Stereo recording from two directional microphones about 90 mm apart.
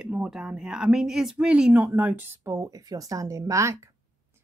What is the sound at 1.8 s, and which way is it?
Speech, 20° right (ahead or behind).